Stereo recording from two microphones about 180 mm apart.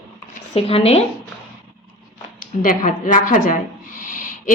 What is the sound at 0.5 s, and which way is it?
Speech, 35° left (ahead or behind).